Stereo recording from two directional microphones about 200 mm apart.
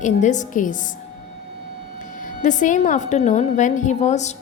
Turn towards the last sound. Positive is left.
turn(degrees=35)  # may be behind; listen again after turning